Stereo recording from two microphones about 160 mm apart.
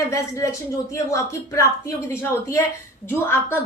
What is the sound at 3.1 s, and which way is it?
Speech, 15° left (ahead or behind).